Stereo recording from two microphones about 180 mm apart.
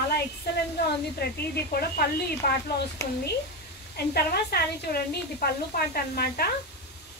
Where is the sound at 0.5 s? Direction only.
65° left (ahead or behind).